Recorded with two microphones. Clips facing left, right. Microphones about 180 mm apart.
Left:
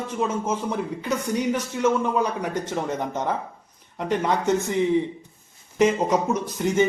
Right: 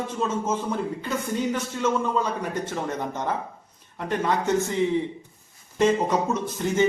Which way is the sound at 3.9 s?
20° left (ahead or behind).